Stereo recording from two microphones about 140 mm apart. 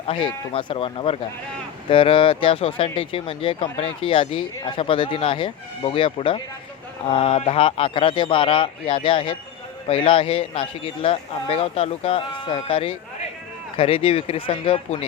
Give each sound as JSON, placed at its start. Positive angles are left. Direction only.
{"t": 0.5, "sound": "a man's voice", "side_deg": 40}